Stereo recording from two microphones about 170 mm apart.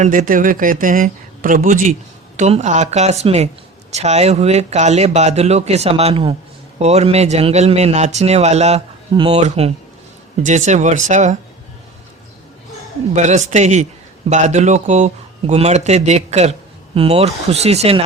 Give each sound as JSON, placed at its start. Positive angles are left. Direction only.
{"t": 0.0, "sound": "speech", "side_deg": -50}
{"t": 13.1, "sound": "speech", "side_deg": -45}